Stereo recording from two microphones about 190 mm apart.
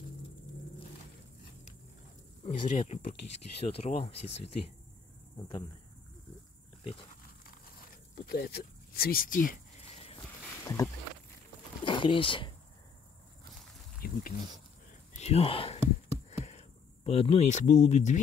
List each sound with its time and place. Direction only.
2.4 s speech: 30° left (ahead or behind)
8.3 s speech: 55° left (ahead or behind)
10.6 s rowboat: 15° left (ahead or behind)
11.8 s speech: 25° left (ahead or behind)
14.0 s a sound: 55° left (ahead or behind)
15.1 s speech: 35° left (ahead or behind)
16.3 s a sound: 35° left (ahead or behind)